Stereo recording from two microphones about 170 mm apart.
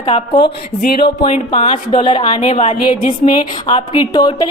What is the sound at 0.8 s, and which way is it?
Speech, 65° left (ahead or behind).